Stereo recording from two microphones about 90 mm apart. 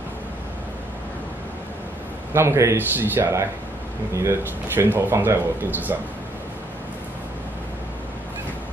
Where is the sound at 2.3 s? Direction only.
30° right (ahead or behind).